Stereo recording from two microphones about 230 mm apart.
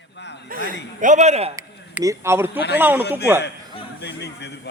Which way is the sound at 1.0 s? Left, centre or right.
Right.